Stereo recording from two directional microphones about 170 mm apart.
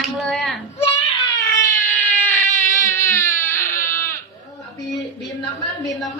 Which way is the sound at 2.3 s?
10° left (ahead or behind).